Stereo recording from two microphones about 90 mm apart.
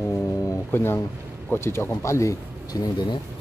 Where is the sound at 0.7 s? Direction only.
25° left (ahead or behind); by 3.2 s 45° left (ahead or behind).